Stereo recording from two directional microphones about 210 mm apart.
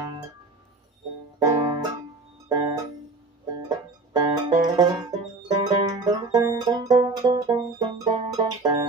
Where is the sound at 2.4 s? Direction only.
20° right (ahead or behind).